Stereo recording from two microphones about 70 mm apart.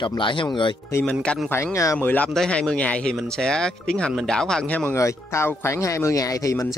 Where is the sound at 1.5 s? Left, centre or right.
Left.